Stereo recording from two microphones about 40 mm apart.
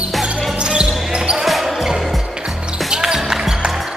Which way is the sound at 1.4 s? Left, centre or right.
Centre.